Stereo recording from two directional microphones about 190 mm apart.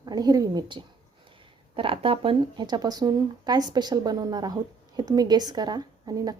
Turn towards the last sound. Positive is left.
turn(degrees=-20)  # may be behind; listen again after turning